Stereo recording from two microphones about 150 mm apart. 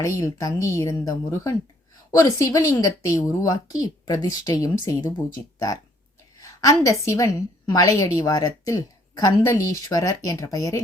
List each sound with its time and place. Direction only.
0.0 s a woman's voice: 20° left (ahead or behind)
6.4 s a sound: 25° left (ahead or behind)
7.0 s a woman's voice: 20° left (ahead or behind)